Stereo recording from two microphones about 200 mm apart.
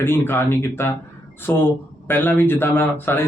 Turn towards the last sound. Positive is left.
turn(degrees=10)  # may be behind; listen again after turning